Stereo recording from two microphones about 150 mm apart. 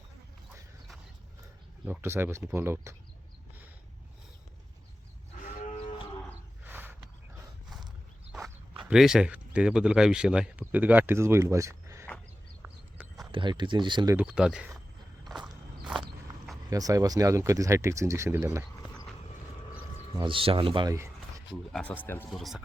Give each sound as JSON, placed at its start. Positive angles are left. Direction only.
{"t": 1.9, "sound": "speech", "side_deg": -15}
{"t": 5.5, "sound": "livestock", "side_deg": 50}
{"t": 6.7, "sound": "a sound", "side_deg": -15}
{"t": 8.9, "sound": "speech", "side_deg": -5}
{"t": 12.6, "sound": "a sound", "side_deg": -5}
{"t": 13.3, "sound": "speech", "side_deg": -30}
{"t": 14.2, "sound": "speech", "side_deg": -5}
{"t": 16.6, "sound": "speech", "side_deg": -25}
{"t": 20.2, "sound": "speech", "side_deg": -35}
{"t": 21.5, "sound": "speech", "side_deg": 5}
{"t": 22.3, "sound": "speech", "side_deg": 0}